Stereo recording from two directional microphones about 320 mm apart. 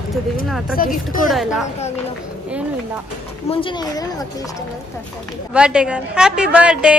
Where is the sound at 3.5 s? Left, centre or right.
Centre.